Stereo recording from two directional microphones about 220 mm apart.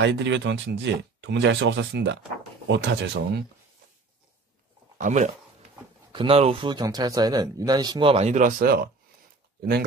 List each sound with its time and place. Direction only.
0.0 s speech: 55° right (ahead or behind)
4.9 s speech: 35° right (ahead or behind)